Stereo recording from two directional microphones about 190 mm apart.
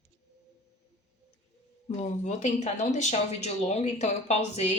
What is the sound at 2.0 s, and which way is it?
Speech, 40° left (ahead or behind).